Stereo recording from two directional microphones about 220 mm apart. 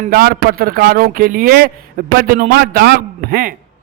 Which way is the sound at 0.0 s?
40° right (ahead or behind).